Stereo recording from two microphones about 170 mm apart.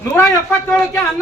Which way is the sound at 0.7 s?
10° left (ahead or behind).